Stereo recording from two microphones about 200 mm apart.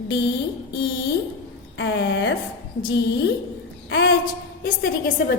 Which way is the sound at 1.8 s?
65° left (ahead or behind).